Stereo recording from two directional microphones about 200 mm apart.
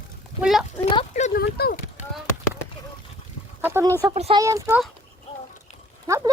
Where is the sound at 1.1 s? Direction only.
35° left (ahead or behind).